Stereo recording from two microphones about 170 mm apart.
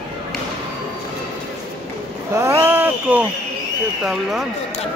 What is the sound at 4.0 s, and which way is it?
Speech, centre (ahead or behind).